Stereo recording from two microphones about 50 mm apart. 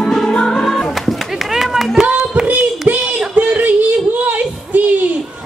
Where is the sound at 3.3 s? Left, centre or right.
Right.